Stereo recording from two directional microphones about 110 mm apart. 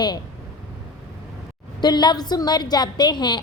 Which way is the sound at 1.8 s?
40° left (ahead or behind).